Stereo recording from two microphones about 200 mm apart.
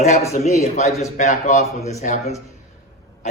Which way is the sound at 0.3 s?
35° left (ahead or behind).